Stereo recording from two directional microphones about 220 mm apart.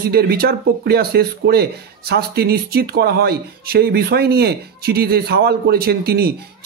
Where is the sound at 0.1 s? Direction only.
45° right (ahead or behind).